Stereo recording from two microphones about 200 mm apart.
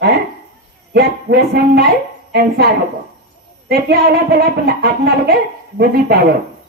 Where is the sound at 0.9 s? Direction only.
55° right (ahead or behind).